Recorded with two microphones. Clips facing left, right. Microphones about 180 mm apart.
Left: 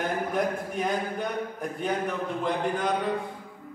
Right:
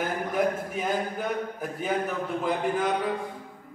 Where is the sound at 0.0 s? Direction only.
5° right (ahead or behind).